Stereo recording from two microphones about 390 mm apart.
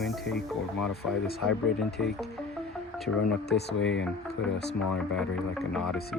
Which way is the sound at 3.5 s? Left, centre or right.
Left.